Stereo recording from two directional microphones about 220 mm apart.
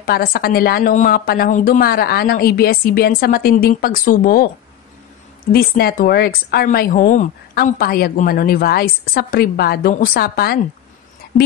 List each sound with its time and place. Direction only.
0.0 s speech: 45° left (ahead or behind)
5.5 s speech: 45° left (ahead or behind)